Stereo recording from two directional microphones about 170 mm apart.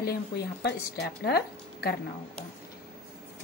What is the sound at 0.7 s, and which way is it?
Speech, 75° left (ahead or behind).